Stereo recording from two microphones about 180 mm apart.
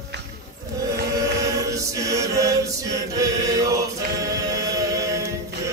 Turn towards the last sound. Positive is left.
turn(degrees=-20)  # may be behind; listen again after turning